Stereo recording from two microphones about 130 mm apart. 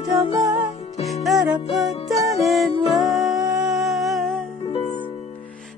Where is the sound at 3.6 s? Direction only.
Centre (ahead or behind).